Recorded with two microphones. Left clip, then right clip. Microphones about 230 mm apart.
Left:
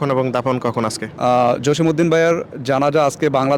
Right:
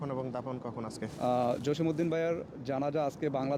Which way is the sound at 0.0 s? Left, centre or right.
Left.